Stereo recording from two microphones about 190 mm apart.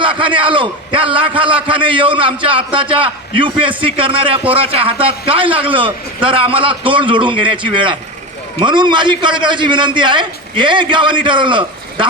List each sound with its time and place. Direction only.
0.0 s a man's voice: 25° right (ahead or behind)